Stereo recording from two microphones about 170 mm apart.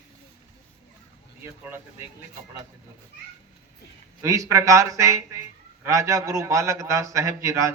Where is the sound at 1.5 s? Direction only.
10° right (ahead or behind).